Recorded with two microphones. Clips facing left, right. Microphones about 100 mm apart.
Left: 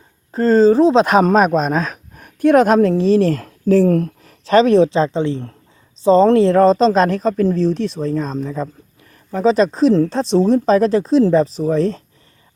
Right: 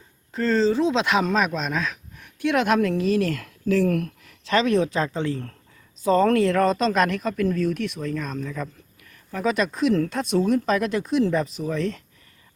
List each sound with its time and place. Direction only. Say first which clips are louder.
0.3 s speech: left 9 dB; 35° left (ahead or behind)